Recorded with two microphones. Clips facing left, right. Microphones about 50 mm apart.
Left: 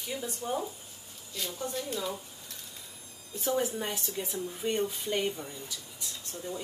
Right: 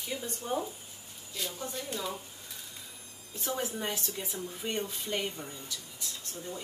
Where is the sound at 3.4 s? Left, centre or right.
Centre.